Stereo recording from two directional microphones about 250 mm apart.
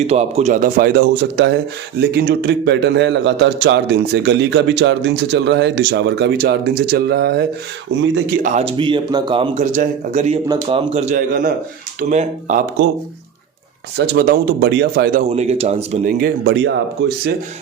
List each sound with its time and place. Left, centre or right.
0.1 s a man's voice: right
8.4 s speech: right
13.9 s speech: right
15.3 s speech: right
16.5 s a man's voice: right